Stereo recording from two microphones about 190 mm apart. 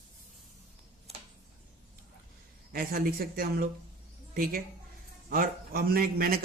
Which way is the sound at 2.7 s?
50° right (ahead or behind).